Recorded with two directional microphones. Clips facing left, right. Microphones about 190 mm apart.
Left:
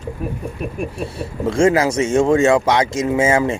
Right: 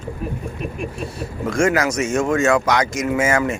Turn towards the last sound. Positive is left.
turn(degrees=30)  # may be behind; listen again after turning